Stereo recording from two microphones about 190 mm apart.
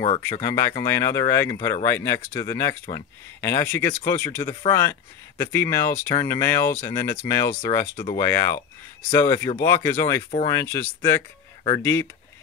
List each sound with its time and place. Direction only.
0.2 s speech: 15° left (ahead or behind)